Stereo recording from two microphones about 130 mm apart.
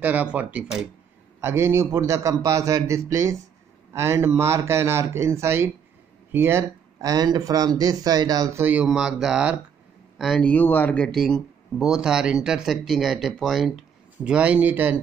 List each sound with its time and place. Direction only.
0.0 s speech: 10° right (ahead or behind); by 8.6 s 30° right (ahead or behind)
8.8 s speech: centre (ahead or behind)
10.4 s speech: 15° left (ahead or behind)
11.1 s speech: centre (ahead or behind); by 15.0 s 15° right (ahead or behind)